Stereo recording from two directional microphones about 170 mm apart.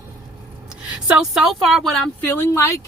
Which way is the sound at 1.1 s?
5° right (ahead or behind).